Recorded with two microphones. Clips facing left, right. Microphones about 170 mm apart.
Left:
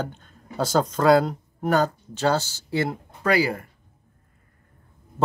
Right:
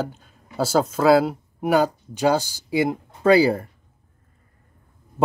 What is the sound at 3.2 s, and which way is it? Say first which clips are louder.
Speech: right 6 dB; 30° right (ahead or behind).